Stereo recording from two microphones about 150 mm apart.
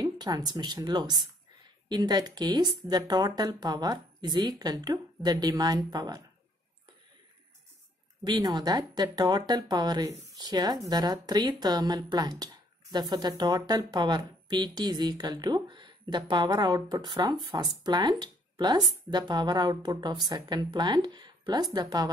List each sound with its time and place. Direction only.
0.0 s speech: 25° right (ahead or behind)
8.2 s speech: 30° right (ahead or behind)